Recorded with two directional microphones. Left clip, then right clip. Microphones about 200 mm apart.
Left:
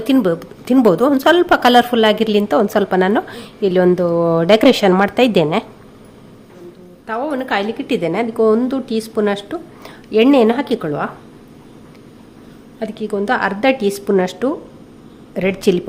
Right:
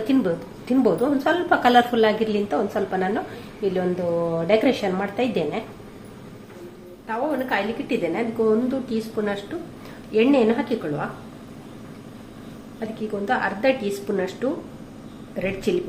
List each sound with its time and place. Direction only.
0.1 s a woman's voice: 45° left (ahead or behind)
7.1 s a woman's voice: 60° left (ahead or behind)
12.8 s a woman's voice: 60° left (ahead or behind)